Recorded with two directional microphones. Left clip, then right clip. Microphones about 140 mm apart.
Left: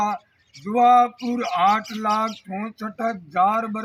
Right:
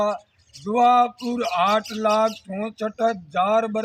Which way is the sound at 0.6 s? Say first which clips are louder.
Left 1 dB; 30° right (ahead or behind).